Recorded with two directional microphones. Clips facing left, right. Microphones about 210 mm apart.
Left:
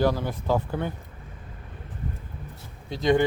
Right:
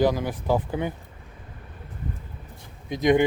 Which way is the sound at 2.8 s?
15° right (ahead or behind).